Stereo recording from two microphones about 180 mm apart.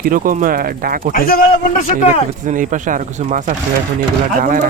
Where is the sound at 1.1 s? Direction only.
55° left (ahead or behind).